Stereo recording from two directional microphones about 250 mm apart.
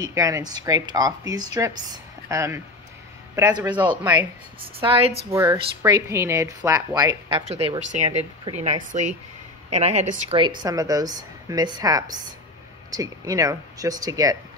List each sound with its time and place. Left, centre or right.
0.0 s a woman's voice: centre
4.0 s a woman's voice: centre
4.7 s a woman's voice: right
5.3 s a woman's voice: centre